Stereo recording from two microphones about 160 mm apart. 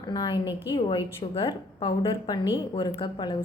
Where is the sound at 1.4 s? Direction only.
30° left (ahead or behind).